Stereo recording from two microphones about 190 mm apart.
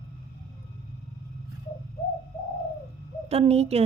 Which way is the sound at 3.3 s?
35° right (ahead or behind).